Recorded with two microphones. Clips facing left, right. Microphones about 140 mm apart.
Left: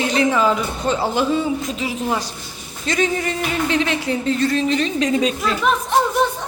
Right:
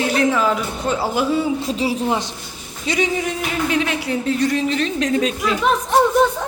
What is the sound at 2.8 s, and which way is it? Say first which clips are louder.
A woman's voice: even; 10° right (ahead or behind).